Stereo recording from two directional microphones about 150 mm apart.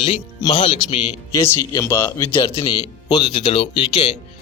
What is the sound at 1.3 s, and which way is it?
A man's voice, 20° left (ahead or behind).